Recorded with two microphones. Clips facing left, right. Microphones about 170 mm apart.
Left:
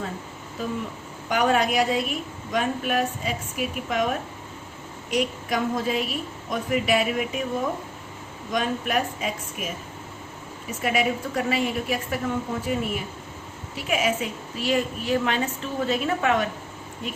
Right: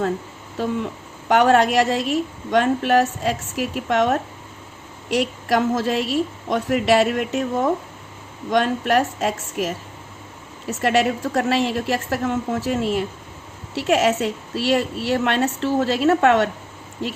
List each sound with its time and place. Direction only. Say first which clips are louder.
1.3 s a woman's voice: right 6 dB; 80° right
10.8 s a woman's voice: right 5 dB; 80° right
13.7 s a woman's voice: right 7 dB; 80° right
17.0 s a woman's voice: right 6 dB; 85° right